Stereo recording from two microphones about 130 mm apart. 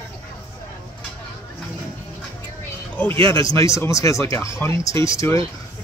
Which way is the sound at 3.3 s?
25° left (ahead or behind).